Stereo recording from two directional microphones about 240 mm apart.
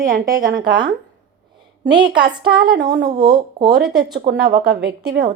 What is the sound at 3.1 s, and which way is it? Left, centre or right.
Speech, centre.